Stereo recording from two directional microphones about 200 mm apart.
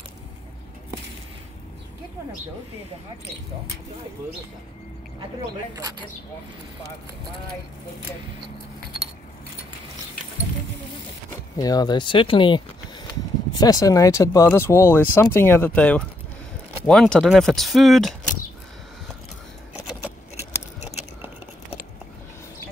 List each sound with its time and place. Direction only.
11.5 s speech: 20° left (ahead or behind); by 18.1 s centre (ahead or behind)